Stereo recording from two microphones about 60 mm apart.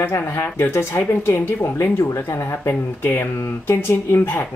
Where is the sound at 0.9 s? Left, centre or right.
Left.